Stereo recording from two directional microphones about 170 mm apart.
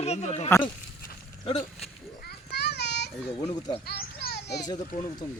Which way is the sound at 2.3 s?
70° left (ahead or behind).